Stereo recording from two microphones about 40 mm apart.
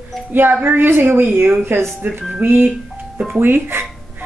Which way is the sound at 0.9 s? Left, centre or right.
Right.